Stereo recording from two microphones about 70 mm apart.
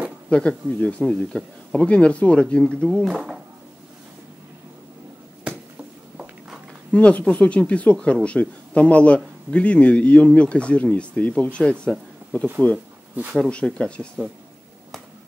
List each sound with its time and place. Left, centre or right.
0.3 s speech: centre
3.1 s speech: centre
5.5 s finger snapping: centre
6.9 s speech: centre